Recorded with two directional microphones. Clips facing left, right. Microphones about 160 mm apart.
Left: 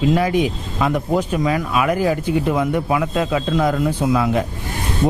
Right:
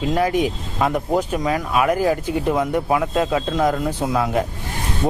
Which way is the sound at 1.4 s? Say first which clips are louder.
Even; 40° right (ahead or behind).